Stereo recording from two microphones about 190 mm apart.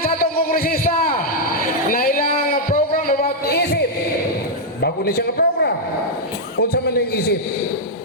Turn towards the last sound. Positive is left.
turn(degrees=55)  # may be behind; listen again after turning